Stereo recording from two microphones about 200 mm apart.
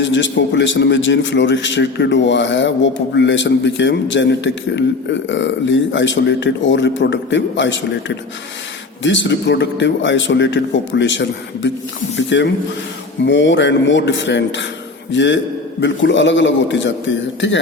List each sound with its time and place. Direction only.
0.0 s a man's voice: 65° left (ahead or behind)